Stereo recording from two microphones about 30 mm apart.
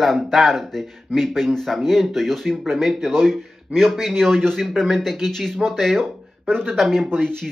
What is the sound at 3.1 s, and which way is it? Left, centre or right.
Speech, centre.